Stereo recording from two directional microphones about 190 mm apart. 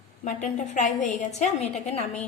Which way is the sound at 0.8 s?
40° left (ahead or behind).